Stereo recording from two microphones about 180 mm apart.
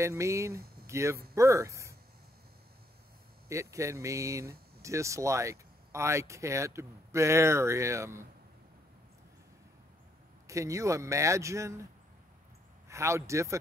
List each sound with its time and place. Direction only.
0.0 s speech: 15° right (ahead or behind)
3.4 s speech: 15° right (ahead or behind)
10.4 s speech: 15° right (ahead or behind)
12.8 s speech: 15° right (ahead or behind)